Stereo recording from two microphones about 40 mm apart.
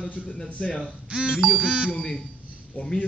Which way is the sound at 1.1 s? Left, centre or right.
Right.